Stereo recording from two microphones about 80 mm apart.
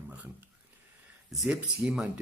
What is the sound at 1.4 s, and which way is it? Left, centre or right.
Speech, centre.